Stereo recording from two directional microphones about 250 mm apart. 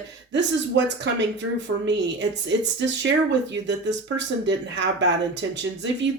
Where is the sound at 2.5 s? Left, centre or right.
Right.